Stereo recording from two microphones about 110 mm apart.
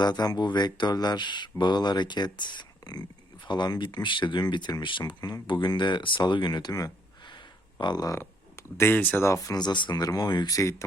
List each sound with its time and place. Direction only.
0.0 s speech: 40° left (ahead or behind)
8.2 s speech: 20° left (ahead or behind)
9.2 s speech: 30° left (ahead or behind)